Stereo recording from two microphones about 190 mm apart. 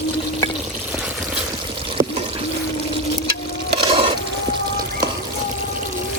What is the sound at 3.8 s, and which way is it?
Stir, 25° right (ahead or behind).